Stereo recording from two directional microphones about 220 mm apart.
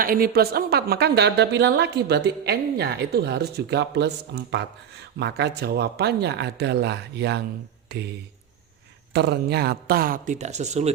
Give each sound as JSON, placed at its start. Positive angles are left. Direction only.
{"t": 0.0, "sound": "a woman's voice", "side_deg": -40}
{"t": 9.1, "sound": "speech", "side_deg": -50}